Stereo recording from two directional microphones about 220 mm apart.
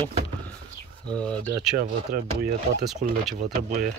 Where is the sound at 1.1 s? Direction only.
5° left (ahead or behind).